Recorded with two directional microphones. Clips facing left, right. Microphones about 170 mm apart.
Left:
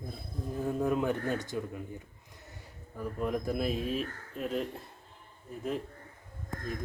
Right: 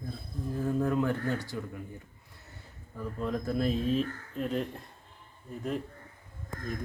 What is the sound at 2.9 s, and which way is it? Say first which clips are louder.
Speech: left 1 dB; 10° left (ahead or behind).